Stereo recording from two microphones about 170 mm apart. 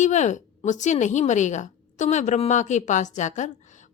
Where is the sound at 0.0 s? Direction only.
45° left (ahead or behind).